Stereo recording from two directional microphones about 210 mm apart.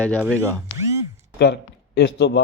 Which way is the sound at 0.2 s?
10° right (ahead or behind).